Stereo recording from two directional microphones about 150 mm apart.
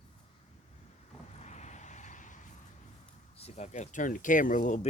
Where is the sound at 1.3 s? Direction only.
50° left (ahead or behind).